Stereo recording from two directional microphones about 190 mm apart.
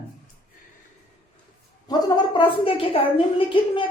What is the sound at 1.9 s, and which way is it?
A woman's voice, 20° left (ahead or behind).